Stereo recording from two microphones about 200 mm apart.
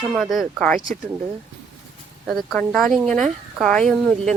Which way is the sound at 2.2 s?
Centre (ahead or behind).